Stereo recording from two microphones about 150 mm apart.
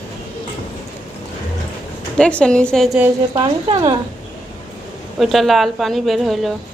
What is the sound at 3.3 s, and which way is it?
Speech, 35° right (ahead or behind).